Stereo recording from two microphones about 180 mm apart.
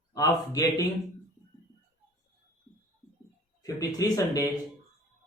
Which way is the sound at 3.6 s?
20° left (ahead or behind).